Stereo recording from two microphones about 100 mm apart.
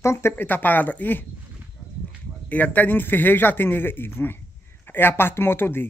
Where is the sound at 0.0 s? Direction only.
25° left (ahead or behind).